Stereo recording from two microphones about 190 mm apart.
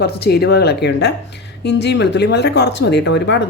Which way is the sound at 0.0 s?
60° left (ahead or behind).